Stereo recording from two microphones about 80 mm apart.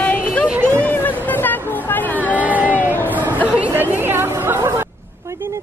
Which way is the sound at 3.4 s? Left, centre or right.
Right.